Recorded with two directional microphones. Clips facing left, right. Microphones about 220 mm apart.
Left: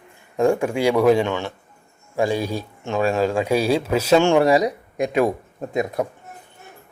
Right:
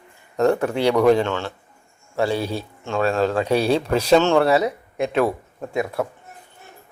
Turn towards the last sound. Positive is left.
turn(degrees=20)  # may be behind; listen again after turning